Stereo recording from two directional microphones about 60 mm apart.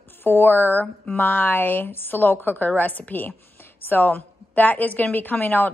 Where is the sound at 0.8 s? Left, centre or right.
Left.